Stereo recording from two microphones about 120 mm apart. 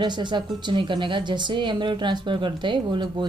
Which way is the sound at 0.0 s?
40° right (ahead or behind).